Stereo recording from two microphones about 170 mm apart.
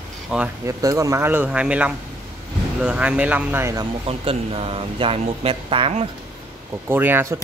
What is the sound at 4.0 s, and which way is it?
Speech, 35° right (ahead or behind).